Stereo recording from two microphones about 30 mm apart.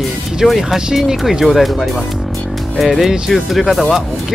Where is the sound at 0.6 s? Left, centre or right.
Centre.